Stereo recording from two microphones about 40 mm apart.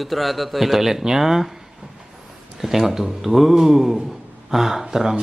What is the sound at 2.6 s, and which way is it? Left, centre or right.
A man's voice, centre.